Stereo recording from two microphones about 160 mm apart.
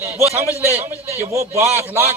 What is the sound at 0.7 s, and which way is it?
A man's voice, 15° right (ahead or behind).